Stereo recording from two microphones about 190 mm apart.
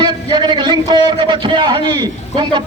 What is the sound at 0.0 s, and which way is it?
A man's voice, 25° right (ahead or behind).